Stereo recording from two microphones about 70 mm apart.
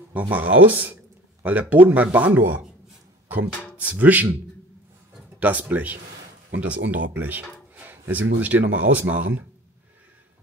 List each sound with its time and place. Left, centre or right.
0.1 s speech: right
5.4 s speech: right